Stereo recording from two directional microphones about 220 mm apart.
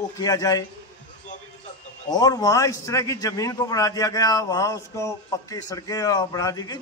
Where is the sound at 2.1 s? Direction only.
15° left (ahead or behind).